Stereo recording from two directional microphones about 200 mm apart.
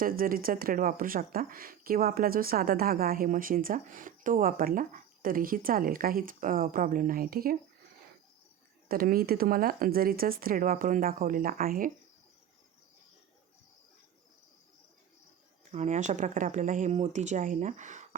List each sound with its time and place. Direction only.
0.0 s speech: 45° right (ahead or behind)
8.9 s speech: 45° right (ahead or behind)
15.7 s speech: 35° right (ahead or behind)